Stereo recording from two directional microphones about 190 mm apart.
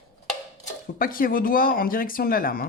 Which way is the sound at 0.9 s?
50° left (ahead or behind).